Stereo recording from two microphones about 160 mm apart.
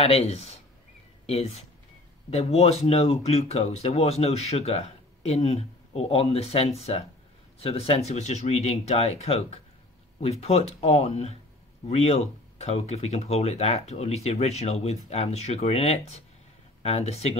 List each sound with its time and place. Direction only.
0.0 s speech: 40° left (ahead or behind)